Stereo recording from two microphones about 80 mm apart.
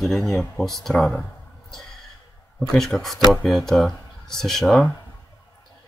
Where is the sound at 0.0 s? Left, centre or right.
Centre.